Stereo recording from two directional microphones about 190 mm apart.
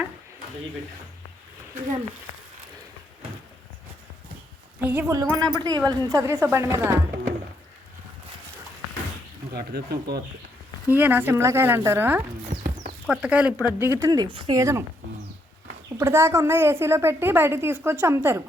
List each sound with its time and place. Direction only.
4.9 s a woman's voice: 15° right (ahead or behind)
9.5 s speech: 55° right (ahead or behind)
10.8 s a woman's voice: 10° right (ahead or behind)
12.6 s clip-clop: 40° right (ahead or behind)
13.1 s a woman's voice: 5° right (ahead or behind)
16.0 s a woman's voice: 15° right (ahead or behind)